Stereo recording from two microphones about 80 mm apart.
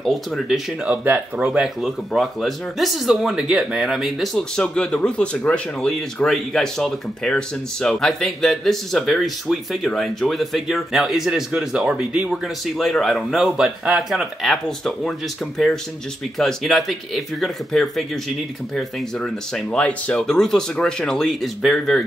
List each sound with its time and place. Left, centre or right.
0.0 s speech: centre
0.8 s speech: right
1.6 s speech: centre
14.5 s speech: centre